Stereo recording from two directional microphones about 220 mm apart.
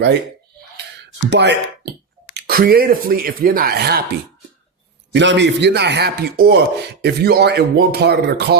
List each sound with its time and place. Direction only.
1.3 s a man's voice: 50° right (ahead or behind)
5.1 s a man's voice: 55° right (ahead or behind)